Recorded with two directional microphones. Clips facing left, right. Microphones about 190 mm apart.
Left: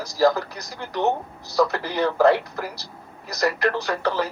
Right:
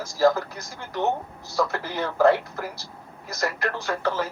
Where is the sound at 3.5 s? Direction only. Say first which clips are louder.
Left 5 dB; 90° left.